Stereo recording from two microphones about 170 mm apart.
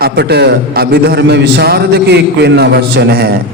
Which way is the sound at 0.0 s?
75° right (ahead or behind).